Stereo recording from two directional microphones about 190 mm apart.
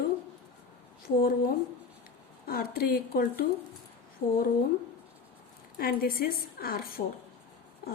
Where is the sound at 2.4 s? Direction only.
50° left (ahead or behind).